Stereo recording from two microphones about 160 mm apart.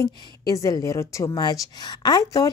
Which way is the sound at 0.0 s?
20° left (ahead or behind).